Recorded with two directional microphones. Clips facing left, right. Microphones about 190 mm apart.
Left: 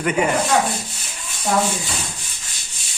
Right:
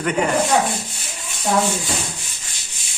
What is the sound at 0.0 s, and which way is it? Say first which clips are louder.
Rub: left 1 dB; 5° left (ahead or behind).